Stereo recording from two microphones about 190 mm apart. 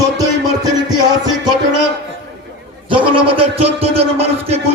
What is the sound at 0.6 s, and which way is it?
Music, 20° right (ahead or behind).